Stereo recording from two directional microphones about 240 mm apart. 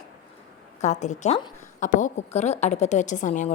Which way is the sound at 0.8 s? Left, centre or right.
Left.